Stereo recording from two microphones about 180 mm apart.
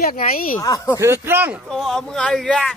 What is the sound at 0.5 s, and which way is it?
Speech, 15° left (ahead or behind).